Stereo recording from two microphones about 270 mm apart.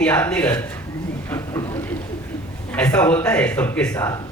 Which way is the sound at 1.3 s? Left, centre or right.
Centre.